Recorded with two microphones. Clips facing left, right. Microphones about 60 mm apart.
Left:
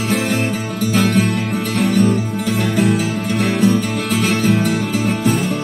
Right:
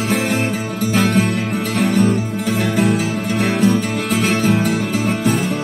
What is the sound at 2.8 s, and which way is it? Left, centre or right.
Music, right.